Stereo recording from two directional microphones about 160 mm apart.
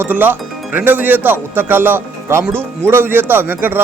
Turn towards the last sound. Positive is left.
turn(degrees=-15)  # may be behind; listen again after turning